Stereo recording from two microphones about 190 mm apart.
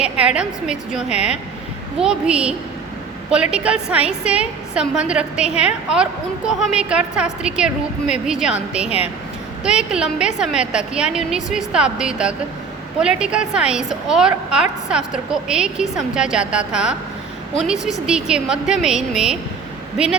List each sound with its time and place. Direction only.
0.0 s a woman's voice: 5° right (ahead or behind)
1.1 s speech: 35° left (ahead or behind)
2.0 s a woman's voice: 5° right (ahead or behind)
18.0 s a woman's voice: 5° right (ahead or behind)